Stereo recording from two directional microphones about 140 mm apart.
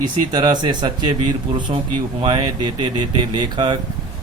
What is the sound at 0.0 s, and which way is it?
Speech, 30° right (ahead or behind).